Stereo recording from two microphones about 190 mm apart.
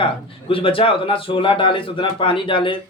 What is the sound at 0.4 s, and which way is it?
A man's voice, 30° left (ahead or behind).